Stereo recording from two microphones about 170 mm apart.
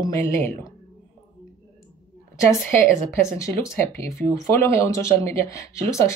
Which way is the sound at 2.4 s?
15° left (ahead or behind).